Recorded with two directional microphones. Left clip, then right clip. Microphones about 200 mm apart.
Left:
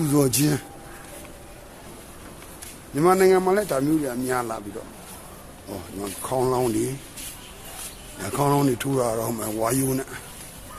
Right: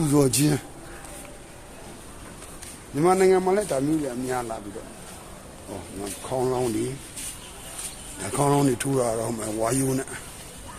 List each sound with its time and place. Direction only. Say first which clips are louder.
0.0 s speech: even; centre (ahead or behind)
2.9 s speech: left 2 dB; 15° left (ahead or behind)
6.2 s speech: left 3 dB; 25° left (ahead or behind)
8.2 s speech: even; 10° left (ahead or behind)